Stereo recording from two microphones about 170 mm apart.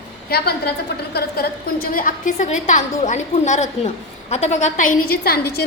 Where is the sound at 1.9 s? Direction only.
55° left (ahead or behind).